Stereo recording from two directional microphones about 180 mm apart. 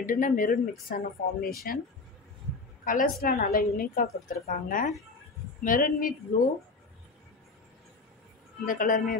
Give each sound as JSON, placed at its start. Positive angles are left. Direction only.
{"t": 0.0, "sound": "a woman's voice", "side_deg": 50}
{"t": 2.8, "sound": "a woman's voice", "side_deg": 50}
{"t": 8.6, "sound": "a woman's voice", "side_deg": 50}